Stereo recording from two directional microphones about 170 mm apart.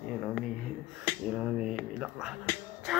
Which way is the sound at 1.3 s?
5° right (ahead or behind).